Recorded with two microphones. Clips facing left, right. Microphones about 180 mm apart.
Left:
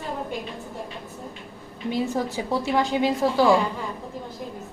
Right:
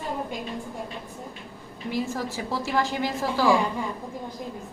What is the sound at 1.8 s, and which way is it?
A woman's voice, 20° left (ahead or behind).